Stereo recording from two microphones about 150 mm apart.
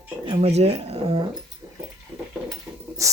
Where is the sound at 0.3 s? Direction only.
40° right (ahead or behind).